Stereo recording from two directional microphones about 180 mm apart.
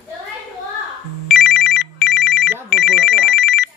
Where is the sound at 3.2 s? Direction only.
70° left (ahead or behind).